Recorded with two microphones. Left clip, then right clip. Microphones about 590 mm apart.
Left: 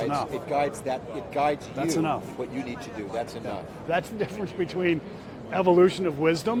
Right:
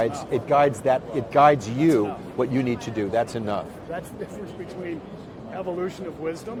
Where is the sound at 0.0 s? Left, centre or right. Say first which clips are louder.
Right 3 dB; right.